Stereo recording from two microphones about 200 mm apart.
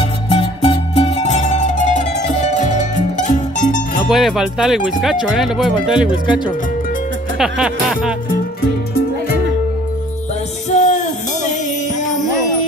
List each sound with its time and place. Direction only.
0.0 s music: 30° left (ahead or behind)
4.1 s speech: centre (ahead or behind)
7.3 s speech: 5° right (ahead or behind)
10.7 s music: 40° left (ahead or behind)